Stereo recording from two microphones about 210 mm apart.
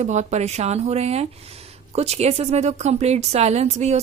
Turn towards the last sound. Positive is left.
turn(degrees=-30)  # may be behind; listen again after turning